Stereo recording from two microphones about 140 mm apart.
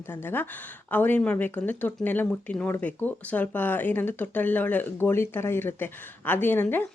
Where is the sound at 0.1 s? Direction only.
15° left (ahead or behind).